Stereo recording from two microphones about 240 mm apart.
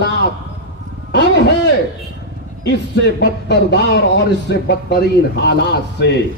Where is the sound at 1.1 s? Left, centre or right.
Left.